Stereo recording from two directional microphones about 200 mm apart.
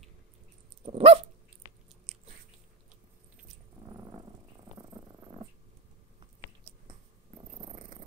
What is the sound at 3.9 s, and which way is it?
Purr, 20° right (ahead or behind).